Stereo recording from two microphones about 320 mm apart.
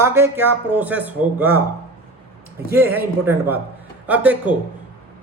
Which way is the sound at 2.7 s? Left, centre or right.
Centre.